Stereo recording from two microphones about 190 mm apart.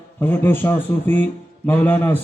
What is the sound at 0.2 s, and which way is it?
Speech, 10° left (ahead or behind).